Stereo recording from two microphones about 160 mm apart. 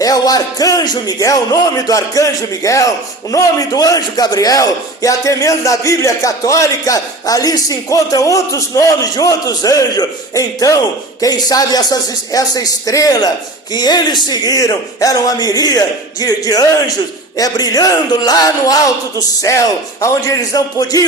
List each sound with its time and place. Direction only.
0.0 s a man's voice: 25° left (ahead or behind)